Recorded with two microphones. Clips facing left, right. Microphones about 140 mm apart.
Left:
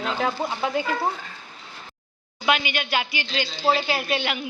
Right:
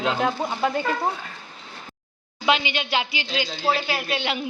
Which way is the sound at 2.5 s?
25° right (ahead or behind).